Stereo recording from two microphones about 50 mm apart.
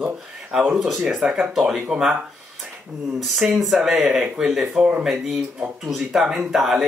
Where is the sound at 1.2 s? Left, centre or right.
Centre.